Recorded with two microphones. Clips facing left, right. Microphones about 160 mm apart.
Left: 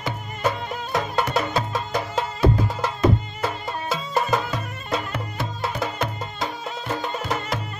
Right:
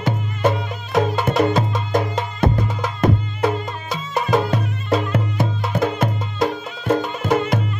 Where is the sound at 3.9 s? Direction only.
Centre (ahead or behind).